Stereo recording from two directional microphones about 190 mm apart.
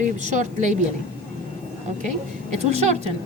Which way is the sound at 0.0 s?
40° right (ahead or behind).